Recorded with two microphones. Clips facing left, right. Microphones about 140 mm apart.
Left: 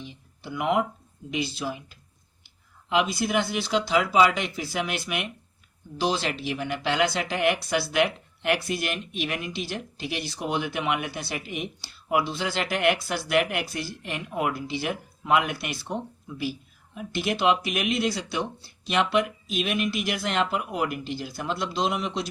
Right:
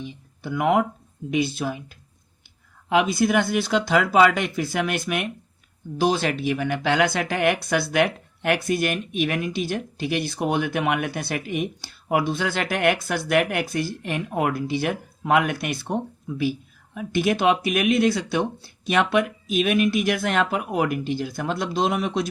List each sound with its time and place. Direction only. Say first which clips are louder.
0.0 s speech: right 6 dB; 55° right (ahead or behind)